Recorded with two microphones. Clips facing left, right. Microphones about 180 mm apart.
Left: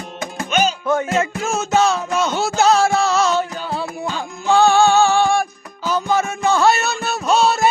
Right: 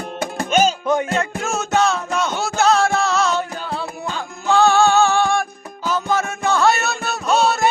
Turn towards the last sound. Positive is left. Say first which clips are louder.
# left 1 dB
turn(degrees=0)  # may be behind; listen again after turning